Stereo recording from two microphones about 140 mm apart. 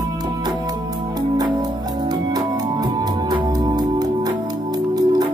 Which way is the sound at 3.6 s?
30° right (ahead or behind).